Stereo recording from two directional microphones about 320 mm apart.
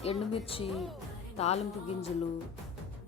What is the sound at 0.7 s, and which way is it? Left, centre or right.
Speech, centre.